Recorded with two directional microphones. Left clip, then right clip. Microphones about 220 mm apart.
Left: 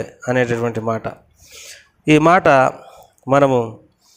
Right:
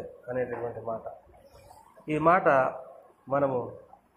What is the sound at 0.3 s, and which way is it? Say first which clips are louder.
Speech: left 14 dB; 65° left (ahead or behind).